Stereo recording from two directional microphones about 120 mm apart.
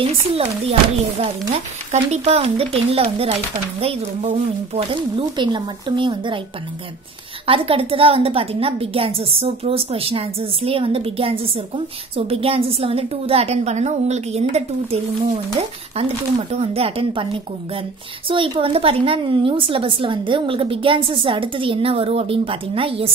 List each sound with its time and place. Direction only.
0.0 s speech: 55° right (ahead or behind)
1.9 s a woman's voice: 65° right (ahead or behind); by 6.4 s 45° right (ahead or behind)
7.4 s a woman's voice: 50° right (ahead or behind)